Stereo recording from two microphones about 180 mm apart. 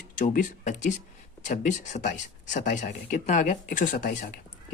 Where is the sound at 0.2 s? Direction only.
45° left (ahead or behind).